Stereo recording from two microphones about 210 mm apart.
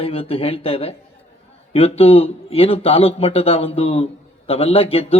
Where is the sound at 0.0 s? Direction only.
25° left (ahead or behind).